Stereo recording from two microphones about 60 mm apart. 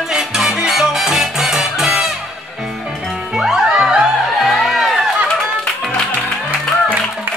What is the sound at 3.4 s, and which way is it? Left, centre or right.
Music, centre.